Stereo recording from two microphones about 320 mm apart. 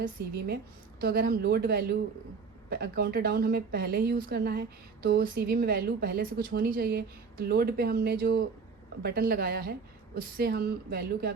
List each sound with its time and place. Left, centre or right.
0.0 s speech: right